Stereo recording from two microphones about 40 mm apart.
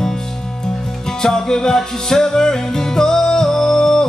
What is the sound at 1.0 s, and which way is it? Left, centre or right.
Music, centre.